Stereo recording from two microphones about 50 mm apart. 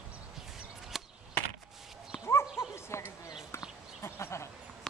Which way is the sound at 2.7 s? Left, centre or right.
Left.